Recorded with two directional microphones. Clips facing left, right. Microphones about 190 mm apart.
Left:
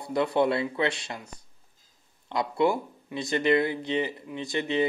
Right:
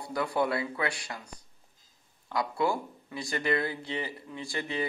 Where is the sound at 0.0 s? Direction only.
25° left (ahead or behind).